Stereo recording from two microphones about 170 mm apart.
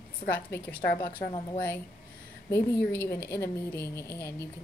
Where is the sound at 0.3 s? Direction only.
10° left (ahead or behind).